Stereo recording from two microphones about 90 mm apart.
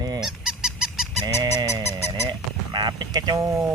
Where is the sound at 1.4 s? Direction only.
55° right (ahead or behind).